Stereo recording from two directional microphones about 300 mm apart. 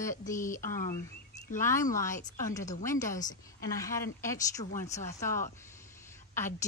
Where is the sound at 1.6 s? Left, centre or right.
Centre.